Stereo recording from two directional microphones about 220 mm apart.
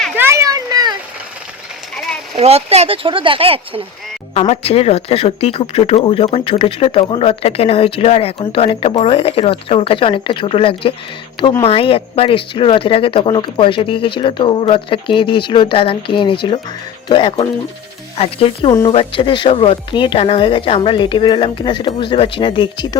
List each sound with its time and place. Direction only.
0.2 s a sound: 10° right (ahead or behind)
2.3 s speech: 30° right (ahead or behind)
4.4 s speech: 30° left (ahead or behind)